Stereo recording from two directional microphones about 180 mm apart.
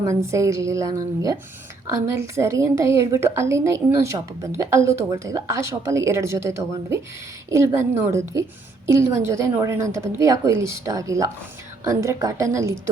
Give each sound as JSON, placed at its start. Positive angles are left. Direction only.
{"t": 0.0, "sound": "a woman's voice", "side_deg": -15}